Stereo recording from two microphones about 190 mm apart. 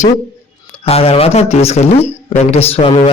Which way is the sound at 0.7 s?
30° left (ahead or behind).